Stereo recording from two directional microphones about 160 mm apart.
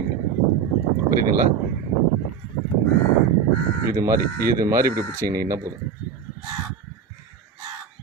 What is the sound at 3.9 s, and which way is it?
Speech, 20° right (ahead or behind).